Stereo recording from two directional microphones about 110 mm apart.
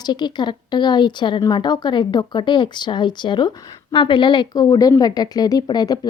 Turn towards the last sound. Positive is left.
turn(degrees=40)  # may be behind; listen again after turning